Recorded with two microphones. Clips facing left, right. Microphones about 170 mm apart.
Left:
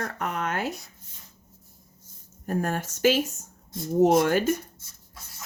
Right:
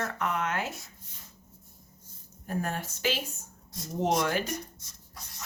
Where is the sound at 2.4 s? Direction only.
45° left (ahead or behind).